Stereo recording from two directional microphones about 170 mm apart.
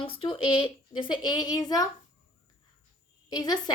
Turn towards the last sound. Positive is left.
turn(degrees=25)  # may be behind; listen again after turning